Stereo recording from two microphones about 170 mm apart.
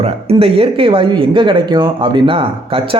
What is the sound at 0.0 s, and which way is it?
Speech, 35° right (ahead or behind).